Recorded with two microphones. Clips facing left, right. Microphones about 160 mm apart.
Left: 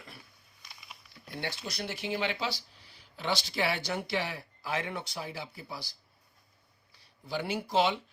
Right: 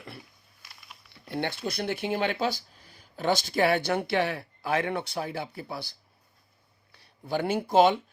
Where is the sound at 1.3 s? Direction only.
60° right (ahead or behind).